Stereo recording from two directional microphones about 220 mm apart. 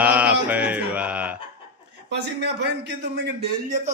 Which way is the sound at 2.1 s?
50° right (ahead or behind).